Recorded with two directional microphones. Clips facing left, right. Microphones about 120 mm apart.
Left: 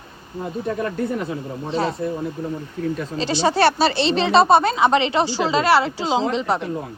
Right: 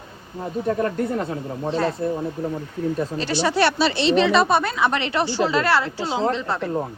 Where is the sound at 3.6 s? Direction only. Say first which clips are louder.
Left 2 dB; 40° left (ahead or behind); by 6.6 s 20° left (ahead or behind).